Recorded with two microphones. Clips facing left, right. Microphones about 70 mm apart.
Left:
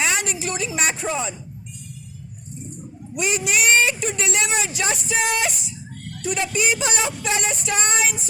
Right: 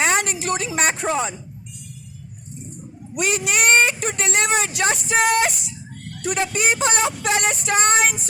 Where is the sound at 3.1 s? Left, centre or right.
Right.